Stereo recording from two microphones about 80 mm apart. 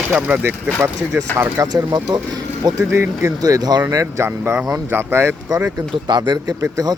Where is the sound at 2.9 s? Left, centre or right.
Right.